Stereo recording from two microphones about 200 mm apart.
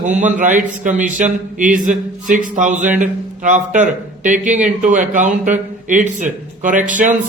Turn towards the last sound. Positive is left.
turn(degrees=-40)  # may be behind; listen again after turning